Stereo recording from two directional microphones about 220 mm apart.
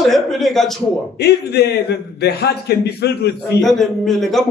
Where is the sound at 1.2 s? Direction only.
50° left (ahead or behind).